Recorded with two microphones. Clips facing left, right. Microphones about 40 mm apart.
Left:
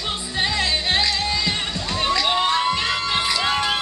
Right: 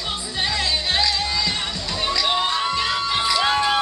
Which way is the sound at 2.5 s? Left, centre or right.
Centre.